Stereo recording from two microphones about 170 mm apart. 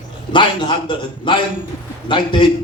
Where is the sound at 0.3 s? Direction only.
30° left (ahead or behind).